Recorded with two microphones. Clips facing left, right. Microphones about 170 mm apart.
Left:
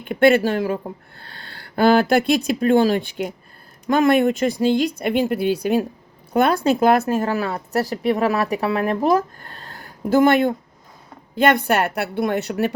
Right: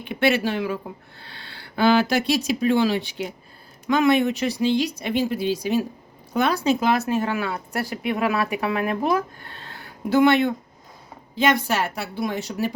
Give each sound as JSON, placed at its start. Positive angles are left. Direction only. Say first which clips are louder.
{"t": 0.0, "sound": "speech", "louder": "left 6 dB", "side_deg": 50}
{"t": 11.3, "sound": "a woman's voice", "louder": "left 4 dB", "side_deg": 60}